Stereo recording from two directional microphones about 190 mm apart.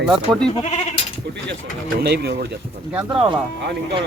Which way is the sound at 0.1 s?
5° left (ahead or behind).